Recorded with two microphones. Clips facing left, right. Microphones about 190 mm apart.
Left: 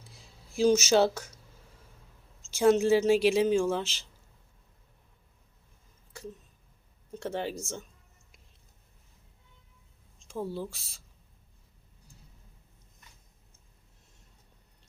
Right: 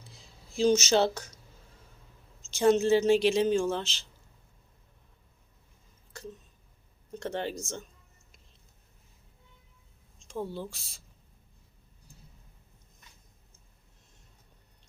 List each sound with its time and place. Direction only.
0.0 s a sound: 10° left (ahead or behind)
2.5 s speech: 10° left (ahead or behind)
7.1 s speech: 5° left (ahead or behind)
10.2 s speech: centre (ahead or behind)